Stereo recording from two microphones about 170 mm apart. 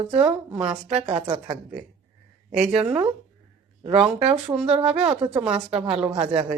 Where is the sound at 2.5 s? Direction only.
5° right (ahead or behind).